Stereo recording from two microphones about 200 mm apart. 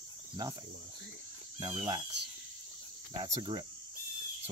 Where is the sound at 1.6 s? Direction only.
25° right (ahead or behind).